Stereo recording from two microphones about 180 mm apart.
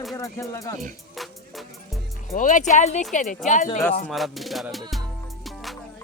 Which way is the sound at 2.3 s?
45° left (ahead or behind).